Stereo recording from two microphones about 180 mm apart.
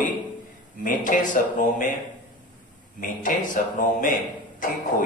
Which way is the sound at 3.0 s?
45° left (ahead or behind).